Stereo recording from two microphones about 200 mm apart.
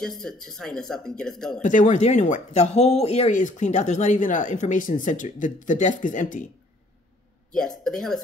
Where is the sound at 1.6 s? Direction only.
40° left (ahead or behind).